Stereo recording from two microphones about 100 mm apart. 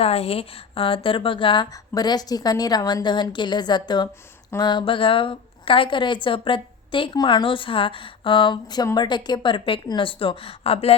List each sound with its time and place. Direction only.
0.0 s a woman's voice: 85° left; by 1.6 s 55° left (ahead or behind)
1.7 s a woman's voice: 40° left (ahead or behind); by 10.9 s 80° left